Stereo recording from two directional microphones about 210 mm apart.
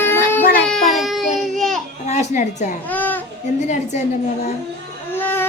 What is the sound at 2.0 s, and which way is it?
Music, 35° left (ahead or behind).